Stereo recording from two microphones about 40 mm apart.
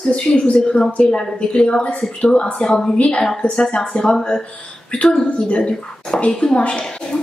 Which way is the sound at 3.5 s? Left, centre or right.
Centre.